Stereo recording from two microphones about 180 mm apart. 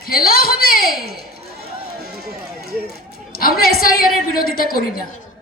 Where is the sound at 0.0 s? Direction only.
55° left (ahead or behind).